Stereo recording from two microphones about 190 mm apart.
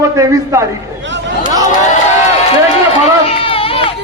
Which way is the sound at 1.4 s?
25° right (ahead or behind).